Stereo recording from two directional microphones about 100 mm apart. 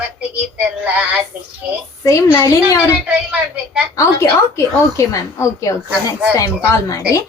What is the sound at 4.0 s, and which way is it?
A woman's voice, 30° left (ahead or behind).